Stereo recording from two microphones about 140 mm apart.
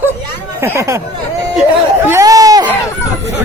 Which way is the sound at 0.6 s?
20° right (ahead or behind).